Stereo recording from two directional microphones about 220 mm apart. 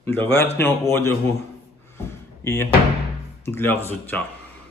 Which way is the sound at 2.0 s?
10° left (ahead or behind).